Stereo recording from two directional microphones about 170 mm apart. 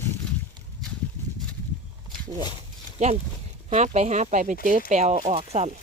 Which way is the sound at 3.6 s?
40° right (ahead or behind).